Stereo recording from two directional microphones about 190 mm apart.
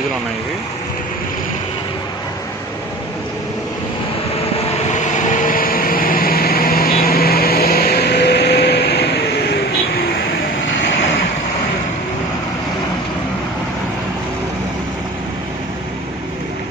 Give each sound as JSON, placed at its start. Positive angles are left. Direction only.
{"t": 4.8, "sound": "vehicle", "side_deg": 40}